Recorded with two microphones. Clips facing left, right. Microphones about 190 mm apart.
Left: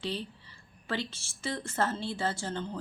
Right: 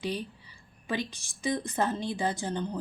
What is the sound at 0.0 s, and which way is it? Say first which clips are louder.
A woman's voice: right 2 dB; 15° right (ahead or behind).